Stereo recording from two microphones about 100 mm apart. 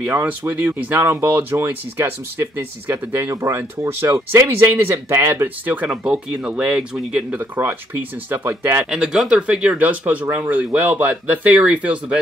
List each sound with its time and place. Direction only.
0.0 s speech: 20° right (ahead or behind)
8.9 s speech: 5° right (ahead or behind)